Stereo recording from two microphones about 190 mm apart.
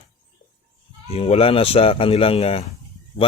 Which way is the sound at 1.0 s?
30° left (ahead or behind).